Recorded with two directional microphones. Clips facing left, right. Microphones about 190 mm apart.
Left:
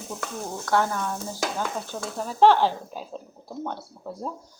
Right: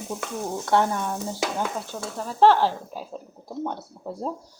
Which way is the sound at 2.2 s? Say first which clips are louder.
Even; centre (ahead or behind).